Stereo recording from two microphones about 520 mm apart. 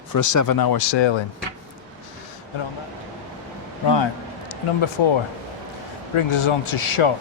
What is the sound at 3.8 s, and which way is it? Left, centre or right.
Speech, left.